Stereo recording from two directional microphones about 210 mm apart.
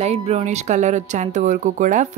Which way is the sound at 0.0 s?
30° right (ahead or behind).